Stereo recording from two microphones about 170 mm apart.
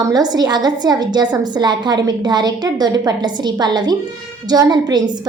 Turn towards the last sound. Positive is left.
turn(degrees=-25)  # may be behind; listen again after turning